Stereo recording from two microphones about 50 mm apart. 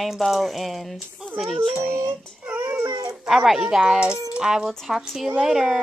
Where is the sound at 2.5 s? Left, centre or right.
Right.